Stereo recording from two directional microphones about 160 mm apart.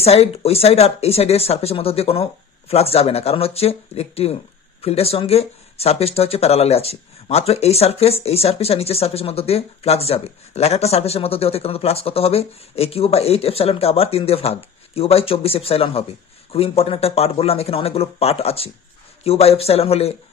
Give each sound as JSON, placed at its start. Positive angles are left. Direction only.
{"t": 0.0, "sound": "speech", "side_deg": 40}